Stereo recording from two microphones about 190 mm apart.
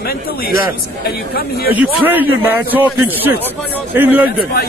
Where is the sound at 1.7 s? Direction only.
10° right (ahead or behind).